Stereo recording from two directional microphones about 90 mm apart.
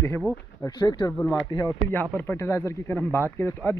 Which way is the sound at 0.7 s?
50° left (ahead or behind).